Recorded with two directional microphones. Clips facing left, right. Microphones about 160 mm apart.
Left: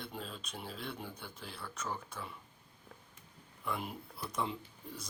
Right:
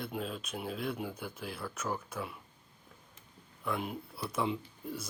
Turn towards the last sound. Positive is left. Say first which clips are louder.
# right 7 dB
turn(degrees=-5)  # may be behind; listen again after turning